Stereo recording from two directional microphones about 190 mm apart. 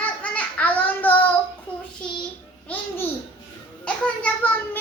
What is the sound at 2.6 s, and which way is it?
Babbling, 10° left (ahead or behind).